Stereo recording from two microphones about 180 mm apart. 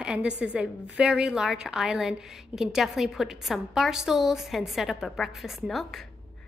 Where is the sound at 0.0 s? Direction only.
5° right (ahead or behind).